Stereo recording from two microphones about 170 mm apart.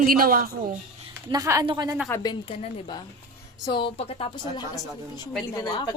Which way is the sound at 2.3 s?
35° left (ahead or behind).